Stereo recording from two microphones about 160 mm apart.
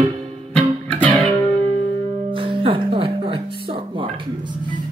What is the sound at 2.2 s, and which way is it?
Music, 35° right (ahead or behind).